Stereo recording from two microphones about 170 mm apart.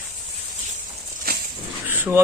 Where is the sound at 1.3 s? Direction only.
65° right (ahead or behind).